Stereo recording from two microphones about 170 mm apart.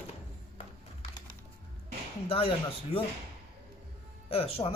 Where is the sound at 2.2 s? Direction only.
35° left (ahead or behind).